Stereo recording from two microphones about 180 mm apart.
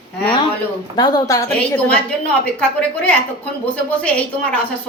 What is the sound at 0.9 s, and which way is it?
Speech, 20° left (ahead or behind).